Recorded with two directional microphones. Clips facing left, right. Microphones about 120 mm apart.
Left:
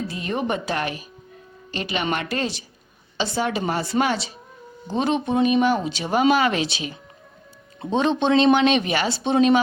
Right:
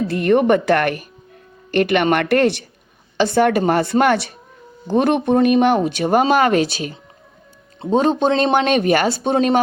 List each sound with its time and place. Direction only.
0.1 s speech: 60° right (ahead or behind)